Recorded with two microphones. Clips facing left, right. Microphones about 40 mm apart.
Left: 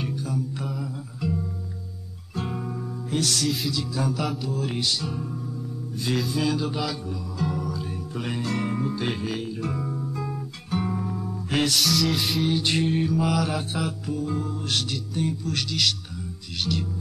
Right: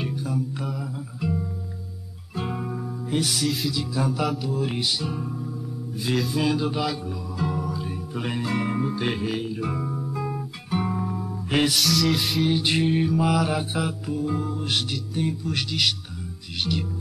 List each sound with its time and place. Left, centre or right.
0.0 s music: centre
3.4 s music: centre
3.7 s music: centre
6.5 s music: centre
12.4 s music: centre